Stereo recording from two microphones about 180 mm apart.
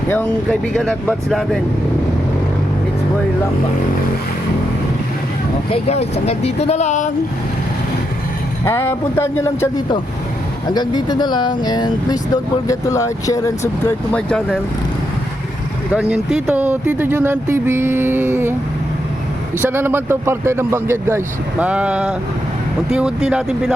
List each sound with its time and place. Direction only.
0.7 s speech: 5° left (ahead or behind)
5.7 s speech: 35° left (ahead or behind)
8.6 s speech: 15° left (ahead or behind)
16.0 s speech: 5° right (ahead or behind)
19.6 s speech: 10° right (ahead or behind)